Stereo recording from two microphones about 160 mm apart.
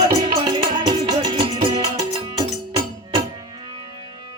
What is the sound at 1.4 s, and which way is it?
Music, 35° right (ahead or behind).